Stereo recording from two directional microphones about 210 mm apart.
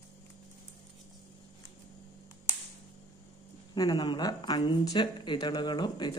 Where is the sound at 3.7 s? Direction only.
20° left (ahead or behind).